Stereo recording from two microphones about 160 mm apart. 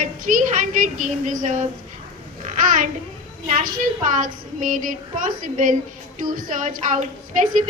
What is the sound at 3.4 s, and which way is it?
A woman's voice, 55° right (ahead or behind).